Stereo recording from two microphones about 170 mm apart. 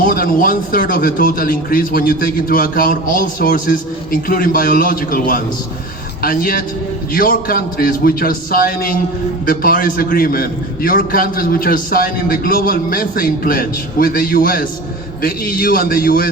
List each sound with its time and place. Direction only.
0.0 s a man's voice: 60° left (ahead or behind)